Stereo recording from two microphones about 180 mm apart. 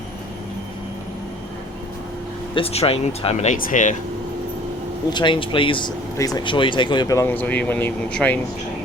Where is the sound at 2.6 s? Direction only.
35° left (ahead or behind).